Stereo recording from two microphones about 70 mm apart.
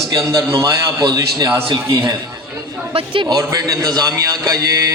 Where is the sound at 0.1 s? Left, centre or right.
Right.